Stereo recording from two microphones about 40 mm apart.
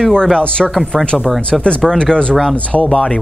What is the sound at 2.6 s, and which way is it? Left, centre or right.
Speech, left.